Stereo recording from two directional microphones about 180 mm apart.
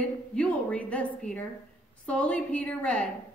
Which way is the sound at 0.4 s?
10° left (ahead or behind).